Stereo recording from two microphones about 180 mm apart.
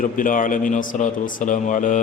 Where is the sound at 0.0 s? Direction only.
50° left (ahead or behind).